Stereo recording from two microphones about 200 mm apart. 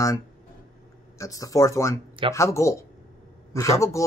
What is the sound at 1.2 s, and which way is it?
Speech, 15° left (ahead or behind).